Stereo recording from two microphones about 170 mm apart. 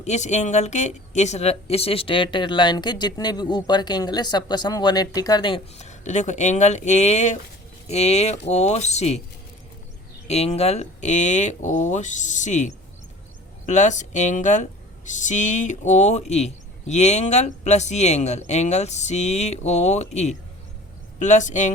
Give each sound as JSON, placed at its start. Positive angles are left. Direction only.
{"t": 0.0, "sound": "speech", "side_deg": 40}
{"t": 10.2, "sound": "speech", "side_deg": 40}